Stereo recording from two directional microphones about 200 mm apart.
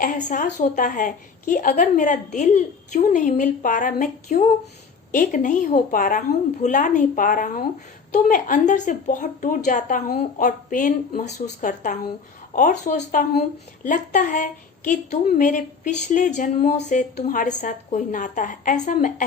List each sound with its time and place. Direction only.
0.0 s a woman's voice: 40° left (ahead or behind)